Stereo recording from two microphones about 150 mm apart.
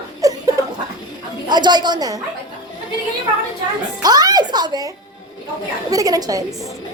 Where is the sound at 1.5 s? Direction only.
30° right (ahead or behind).